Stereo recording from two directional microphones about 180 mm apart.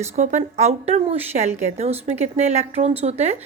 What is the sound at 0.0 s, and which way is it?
A woman's voice, 45° right (ahead or behind).